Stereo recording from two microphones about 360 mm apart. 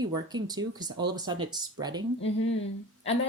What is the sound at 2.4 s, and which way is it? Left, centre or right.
Speech, left.